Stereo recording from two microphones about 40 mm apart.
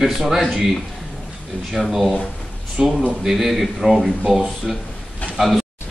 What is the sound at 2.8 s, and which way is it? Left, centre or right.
Speech, centre.